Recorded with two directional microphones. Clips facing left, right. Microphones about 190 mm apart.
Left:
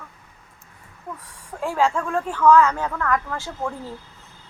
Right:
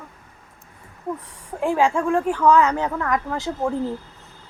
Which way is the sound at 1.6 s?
15° right (ahead or behind).